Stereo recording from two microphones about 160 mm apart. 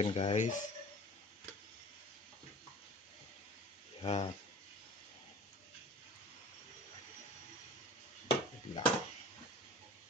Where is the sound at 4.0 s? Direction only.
35° left (ahead or behind).